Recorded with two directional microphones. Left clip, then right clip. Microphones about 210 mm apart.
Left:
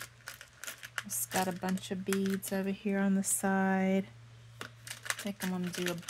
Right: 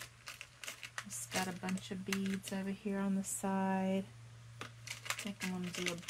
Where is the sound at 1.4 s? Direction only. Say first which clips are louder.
Left 6 dB; 50° left (ahead or behind).